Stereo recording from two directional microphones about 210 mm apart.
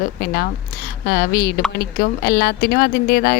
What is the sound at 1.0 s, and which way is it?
Speech, 45° left (ahead or behind).